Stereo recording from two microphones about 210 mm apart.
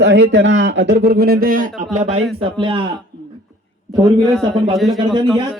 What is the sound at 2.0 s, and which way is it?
Speech, 30° right (ahead or behind).